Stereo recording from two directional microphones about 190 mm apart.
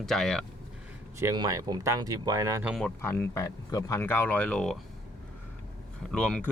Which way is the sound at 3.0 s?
10° left (ahead or behind).